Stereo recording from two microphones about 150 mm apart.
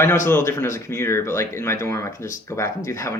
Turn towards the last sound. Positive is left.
turn(degrees=20)  # may be behind; listen again after turning